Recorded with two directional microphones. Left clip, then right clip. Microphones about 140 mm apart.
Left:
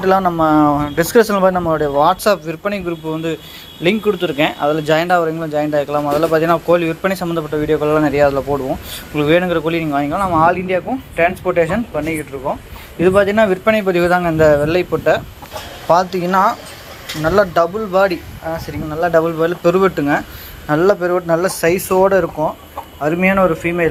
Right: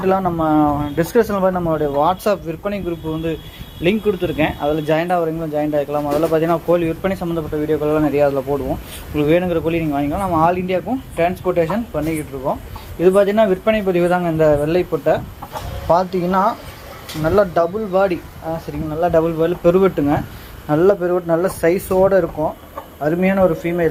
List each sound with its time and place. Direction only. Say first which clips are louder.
0.0 s speech: left 4 dB; 5° left (ahead or behind)
9.1 s speech: left 2 dB; 5° right (ahead or behind)
15.9 s speech: left 2 dB; 10° right (ahead or behind); by 23.8 s 5° left (ahead or behind)